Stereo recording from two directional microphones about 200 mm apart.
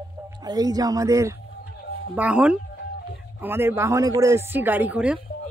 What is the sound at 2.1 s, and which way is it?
Speech, 5° right (ahead or behind).